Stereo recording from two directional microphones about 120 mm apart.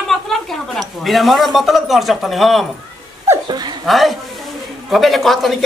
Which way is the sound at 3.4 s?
35° right (ahead or behind).